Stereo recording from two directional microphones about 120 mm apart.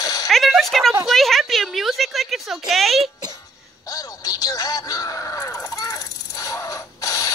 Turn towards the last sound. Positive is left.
turn(degrees=30)  # may be behind; listen again after turning